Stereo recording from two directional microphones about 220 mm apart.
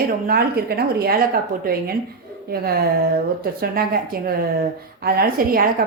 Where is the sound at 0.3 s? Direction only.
45° right (ahead or behind).